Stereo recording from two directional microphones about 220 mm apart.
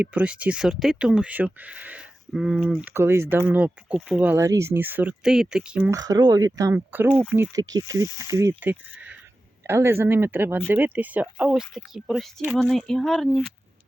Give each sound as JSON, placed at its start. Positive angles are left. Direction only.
{"t": 0.0, "sound": "speech", "side_deg": -5}
{"t": 6.0, "sound": "speech", "side_deg": -15}